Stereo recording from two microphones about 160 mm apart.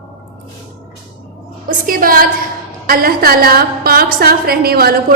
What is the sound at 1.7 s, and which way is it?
A woman's voice, 60° right (ahead or behind).